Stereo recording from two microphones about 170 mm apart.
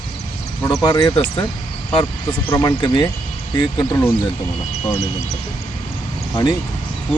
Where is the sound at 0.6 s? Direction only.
20° left (ahead or behind).